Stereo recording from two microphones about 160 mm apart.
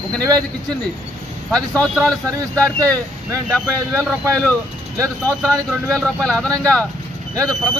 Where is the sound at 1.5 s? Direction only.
5° left (ahead or behind).